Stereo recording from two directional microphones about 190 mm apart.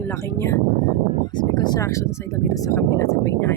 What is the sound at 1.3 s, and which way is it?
Speech, 20° left (ahead or behind).